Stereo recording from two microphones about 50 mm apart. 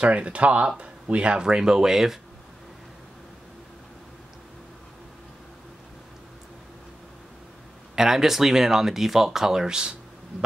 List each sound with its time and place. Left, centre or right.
0.0 s speech: right; by 2.1 s centre
7.9 s speech: centre